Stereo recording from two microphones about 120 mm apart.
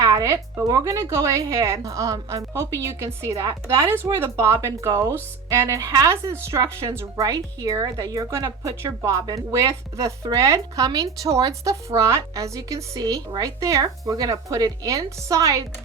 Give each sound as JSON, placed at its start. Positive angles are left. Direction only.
{"t": 0.0, "sound": "speech", "side_deg": -30}